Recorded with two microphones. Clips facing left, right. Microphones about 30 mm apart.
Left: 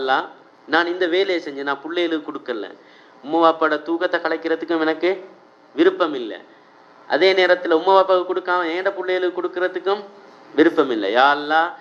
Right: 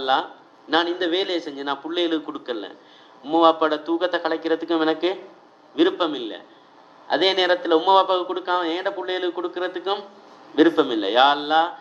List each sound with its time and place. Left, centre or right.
0.0 s a man's voice: centre